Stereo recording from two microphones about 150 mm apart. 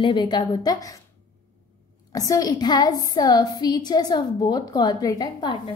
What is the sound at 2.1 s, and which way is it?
A woman's voice, 25° left (ahead or behind).